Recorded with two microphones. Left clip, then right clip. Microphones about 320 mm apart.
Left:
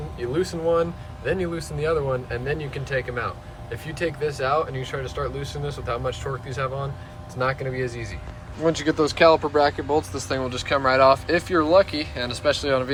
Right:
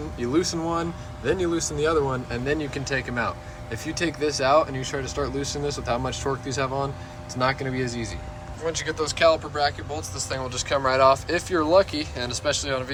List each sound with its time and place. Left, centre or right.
0.2 s speech: centre
8.6 s speech: centre